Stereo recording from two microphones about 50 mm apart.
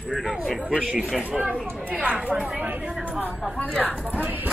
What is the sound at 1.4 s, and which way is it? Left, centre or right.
Speech, centre.